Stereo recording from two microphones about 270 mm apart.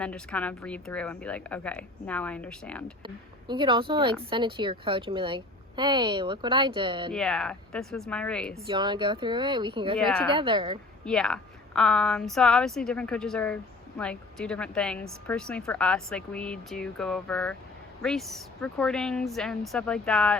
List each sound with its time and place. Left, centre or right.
0.0 s a woman's voice: centre
3.0 s speech: centre
7.1 s a woman's voice: centre
8.6 s speech: centre
10.0 s a woman's voice: centre
10.3 s speech: centre
11.0 s a woman's voice: centre